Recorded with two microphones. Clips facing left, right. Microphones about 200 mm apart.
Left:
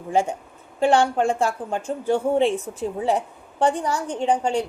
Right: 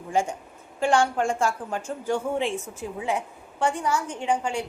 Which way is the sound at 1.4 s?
35° left (ahead or behind).